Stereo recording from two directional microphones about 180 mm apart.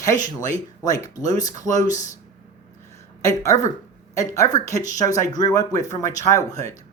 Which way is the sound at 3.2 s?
15° left (ahead or behind).